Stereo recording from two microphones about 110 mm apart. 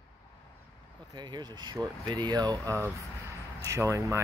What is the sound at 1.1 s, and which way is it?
Speech, 40° right (ahead or behind).